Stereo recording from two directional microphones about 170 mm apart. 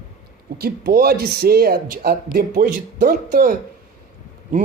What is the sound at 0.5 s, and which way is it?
Speech, 65° right (ahead or behind).